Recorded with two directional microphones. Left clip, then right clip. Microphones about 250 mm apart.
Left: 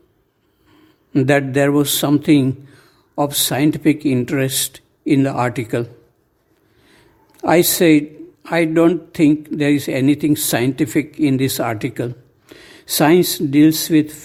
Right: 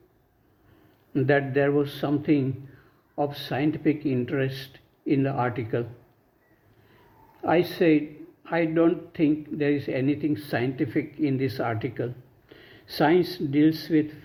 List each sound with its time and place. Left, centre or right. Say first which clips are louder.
1.1 s speech: left 7 dB; left
7.4 s speech: left 9 dB; left